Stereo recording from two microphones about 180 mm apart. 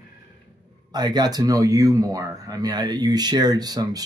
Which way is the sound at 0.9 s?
25° right (ahead or behind).